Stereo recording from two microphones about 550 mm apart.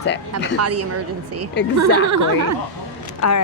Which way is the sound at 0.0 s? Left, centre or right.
Centre.